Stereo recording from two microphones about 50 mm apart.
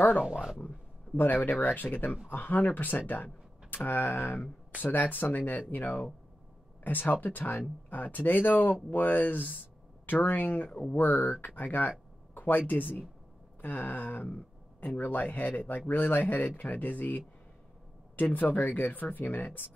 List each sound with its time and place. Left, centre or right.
0.2 s speech: centre
0.6 s speech: left
18.3 s speech: left